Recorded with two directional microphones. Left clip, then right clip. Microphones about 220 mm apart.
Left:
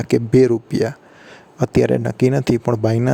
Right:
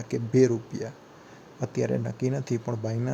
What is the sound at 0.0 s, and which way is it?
Speech, 50° left (ahead or behind).